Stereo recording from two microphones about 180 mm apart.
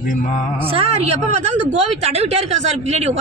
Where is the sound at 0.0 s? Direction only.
45° left (ahead or behind).